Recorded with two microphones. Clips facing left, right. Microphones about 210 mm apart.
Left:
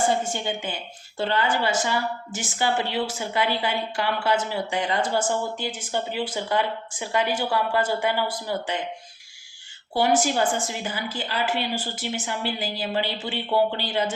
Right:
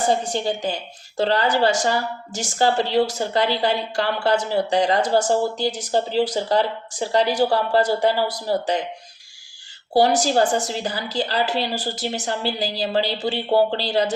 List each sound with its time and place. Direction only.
0.1 s speech: 40° right (ahead or behind)
9.9 s speech: 40° right (ahead or behind)